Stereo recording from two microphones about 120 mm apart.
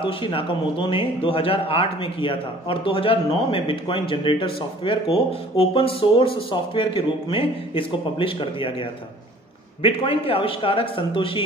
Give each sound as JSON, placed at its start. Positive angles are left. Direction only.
{"t": 0.0, "sound": "speech", "side_deg": 45}
{"t": 9.8, "sound": "speech", "side_deg": 50}